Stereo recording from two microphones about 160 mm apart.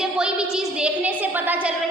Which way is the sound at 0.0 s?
5° right (ahead or behind).